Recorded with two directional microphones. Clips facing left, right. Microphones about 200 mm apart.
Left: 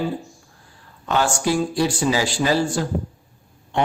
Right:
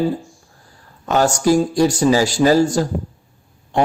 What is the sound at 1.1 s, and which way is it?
A man's voice, 40° right (ahead or behind).